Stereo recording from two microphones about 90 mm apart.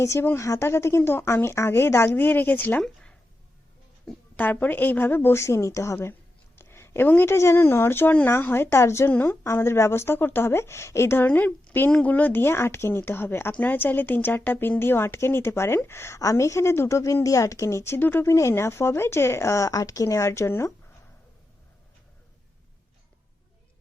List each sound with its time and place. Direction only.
0.0 s speech: 35° left (ahead or behind)
2.8 s a sound: 10° left (ahead or behind)
4.4 s speech: 20° left (ahead or behind)